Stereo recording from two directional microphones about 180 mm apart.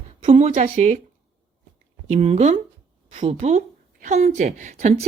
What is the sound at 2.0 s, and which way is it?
Speech, 35° right (ahead or behind).